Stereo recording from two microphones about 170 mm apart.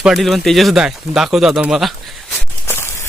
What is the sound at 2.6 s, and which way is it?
Walk, 15° left (ahead or behind).